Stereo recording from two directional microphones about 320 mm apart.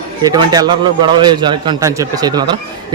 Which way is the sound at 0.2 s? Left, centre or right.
Centre.